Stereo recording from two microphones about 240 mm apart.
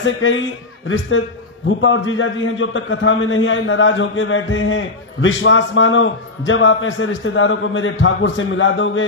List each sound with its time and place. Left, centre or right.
0.0 s a man's voice: left